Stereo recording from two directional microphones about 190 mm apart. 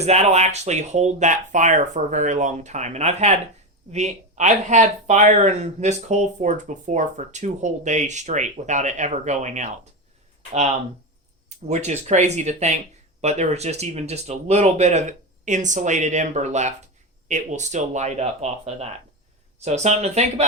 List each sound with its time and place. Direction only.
0.0 s speech: 35° right (ahead or behind)